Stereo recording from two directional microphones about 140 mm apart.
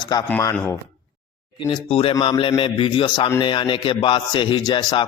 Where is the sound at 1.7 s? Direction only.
40° left (ahead or behind).